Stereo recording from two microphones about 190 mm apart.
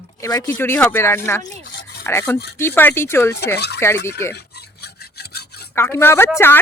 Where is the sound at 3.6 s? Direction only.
60° left (ahead or behind).